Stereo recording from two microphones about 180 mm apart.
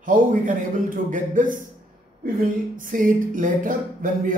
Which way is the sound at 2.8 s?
50° right (ahead or behind).